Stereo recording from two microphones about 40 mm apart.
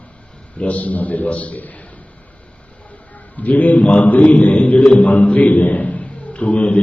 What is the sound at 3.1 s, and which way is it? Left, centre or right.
A man's voice, left.